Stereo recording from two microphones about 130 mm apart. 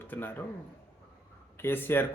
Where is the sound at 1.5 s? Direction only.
15° left (ahead or behind).